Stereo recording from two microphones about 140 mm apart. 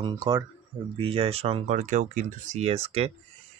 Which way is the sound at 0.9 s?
40° right (ahead or behind).